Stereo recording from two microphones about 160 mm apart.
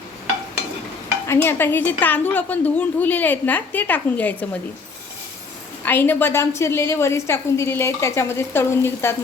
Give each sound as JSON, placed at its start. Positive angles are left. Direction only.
{"t": 1.3, "sound": "a woman's voice", "side_deg": 15}
{"t": 5.8, "sound": "a woman's voice", "side_deg": 10}